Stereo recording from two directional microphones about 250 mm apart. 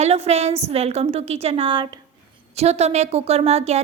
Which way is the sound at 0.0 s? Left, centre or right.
Right.